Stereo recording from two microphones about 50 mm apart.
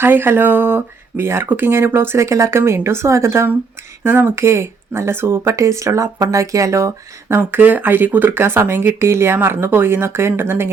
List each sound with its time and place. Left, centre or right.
0.0 s speech: right
4.0 s speech: right
4.4 s speech: right
7.6 s speech: right
8.4 s speech: right